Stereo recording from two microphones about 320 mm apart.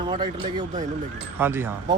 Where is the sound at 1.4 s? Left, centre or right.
Centre.